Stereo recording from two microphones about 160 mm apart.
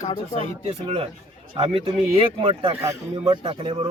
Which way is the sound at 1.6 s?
35° right (ahead or behind).